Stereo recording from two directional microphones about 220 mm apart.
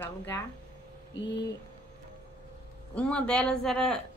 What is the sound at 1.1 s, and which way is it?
Speech, 55° left (ahead or behind).